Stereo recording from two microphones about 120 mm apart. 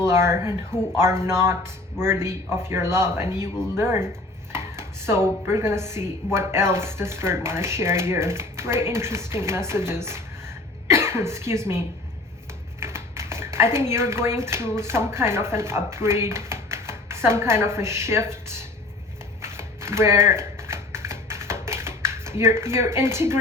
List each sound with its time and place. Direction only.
0.1 s a woman's voice: 20° right (ahead or behind)
12.8 s a sound: 20° right (ahead or behind)
14.8 s a woman's voice: 20° right (ahead or behind)
19.4 s shuffling cards: 20° right (ahead or behind)